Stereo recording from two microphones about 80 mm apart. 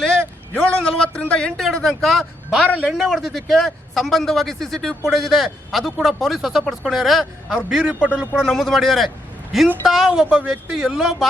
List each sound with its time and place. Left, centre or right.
0.5 s a man's voice: centre
1.6 s a man's voice: centre
8.4 s a man's voice: centre
10.1 s a man's voice: centre